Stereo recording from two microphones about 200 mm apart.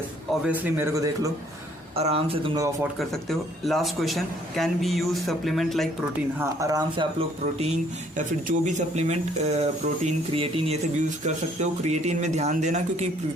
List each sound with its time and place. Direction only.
0.4 s a man's voice: 10° right (ahead or behind)
2.0 s speech: 30° right (ahead or behind)
3.0 s a man's voice: centre (ahead or behind)
6.4 s speech: 15° right (ahead or behind); by 13.1 s 35° right (ahead or behind)